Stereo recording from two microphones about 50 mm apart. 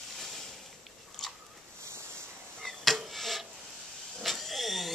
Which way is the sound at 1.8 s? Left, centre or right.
Right.